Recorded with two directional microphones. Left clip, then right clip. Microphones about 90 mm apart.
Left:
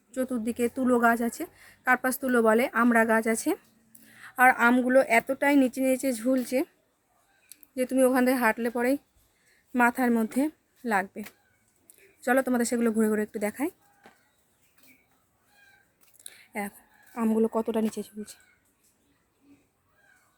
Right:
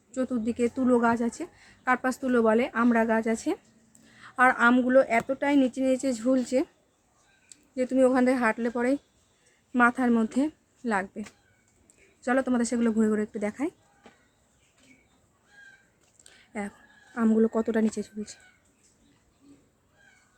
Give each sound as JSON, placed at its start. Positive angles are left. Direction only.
{"t": 0.1, "sound": "a woman's voice", "side_deg": 25}
{"t": 2.2, "sound": "speech", "side_deg": 45}
{"t": 4.0, "sound": "a sound", "side_deg": 15}
{"t": 4.5, "sound": "a woman's voice", "side_deg": 30}
{"t": 5.3, "sound": "speech", "side_deg": 60}
{"t": 5.8, "sound": "a woman's voice", "side_deg": 30}
{"t": 7.5, "sound": "a woman's voice", "side_deg": 25}
{"t": 12.2, "sound": "a woman's voice", "side_deg": 35}
{"t": 16.2, "sound": "a sound", "side_deg": 20}
{"t": 17.2, "sound": "speech", "side_deg": -10}